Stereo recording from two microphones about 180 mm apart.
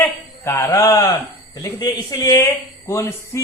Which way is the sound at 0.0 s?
15° left (ahead or behind).